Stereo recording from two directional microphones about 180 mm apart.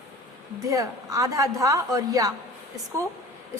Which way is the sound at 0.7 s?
20° right (ahead or behind).